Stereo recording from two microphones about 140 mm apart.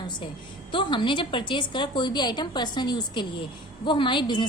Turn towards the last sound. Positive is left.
turn(degrees=35)  # may be behind; listen again after turning